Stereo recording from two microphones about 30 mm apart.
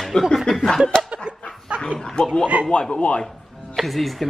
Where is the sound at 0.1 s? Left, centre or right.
Left.